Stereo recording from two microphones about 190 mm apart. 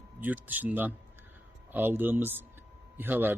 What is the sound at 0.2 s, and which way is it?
Speech, 10° right (ahead or behind).